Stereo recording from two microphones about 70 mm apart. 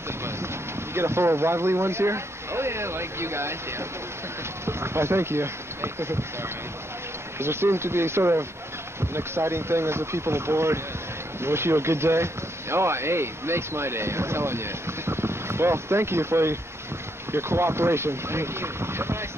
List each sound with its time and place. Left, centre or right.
0.9 s speech: right
7.3 s speech: right